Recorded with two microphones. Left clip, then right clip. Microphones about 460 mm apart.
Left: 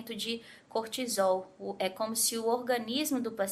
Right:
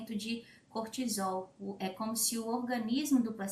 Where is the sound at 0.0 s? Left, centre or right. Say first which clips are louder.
Left 4 dB; left.